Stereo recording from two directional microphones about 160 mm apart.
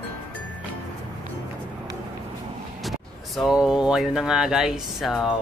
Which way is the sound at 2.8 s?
Centre (ahead or behind).